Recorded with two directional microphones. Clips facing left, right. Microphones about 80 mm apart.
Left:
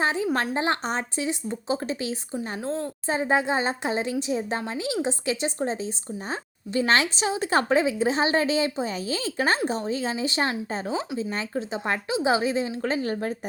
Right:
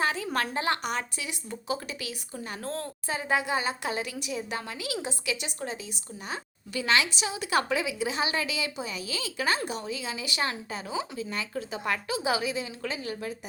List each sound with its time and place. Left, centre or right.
0.0 s a woman's voice: left
2.6 s a woman's voice: centre
3.1 s a woman's voice: left